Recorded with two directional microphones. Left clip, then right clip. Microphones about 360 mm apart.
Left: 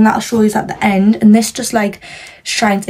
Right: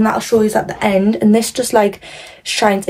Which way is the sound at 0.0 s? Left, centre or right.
Centre.